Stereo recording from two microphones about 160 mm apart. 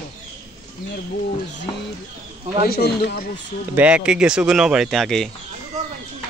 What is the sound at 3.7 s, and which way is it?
Speech, 10° right (ahead or behind).